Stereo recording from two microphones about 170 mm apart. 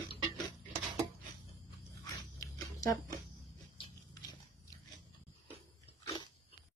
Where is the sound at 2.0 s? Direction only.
20° left (ahead or behind).